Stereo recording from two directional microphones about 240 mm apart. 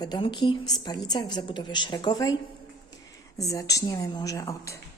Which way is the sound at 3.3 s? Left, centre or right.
Centre.